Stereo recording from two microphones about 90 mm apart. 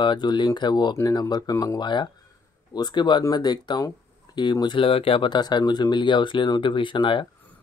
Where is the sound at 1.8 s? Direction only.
60° left (ahead or behind).